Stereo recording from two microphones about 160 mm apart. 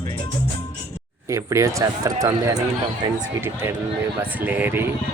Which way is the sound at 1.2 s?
20° right (ahead or behind).